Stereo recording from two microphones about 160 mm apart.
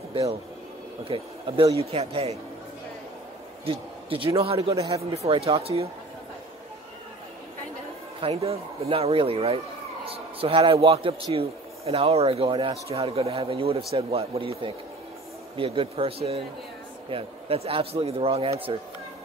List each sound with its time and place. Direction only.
1.0 s a man's voice: 35° right (ahead or behind)
3.6 s a man's voice: 35° right (ahead or behind)
4.7 s speech: 20° right (ahead or behind)
5.1 s a man's voice: 40° right (ahead or behind)
8.2 s a man's voice: 40° right (ahead or behind)
15.5 s a man's voice: 35° right (ahead or behind)